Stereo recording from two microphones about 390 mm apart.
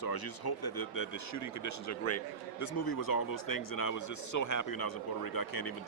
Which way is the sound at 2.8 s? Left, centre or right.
Left.